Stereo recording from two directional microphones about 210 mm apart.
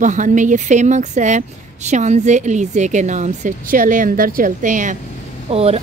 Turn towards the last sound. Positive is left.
turn(degrees=-30)  # may be behind; listen again after turning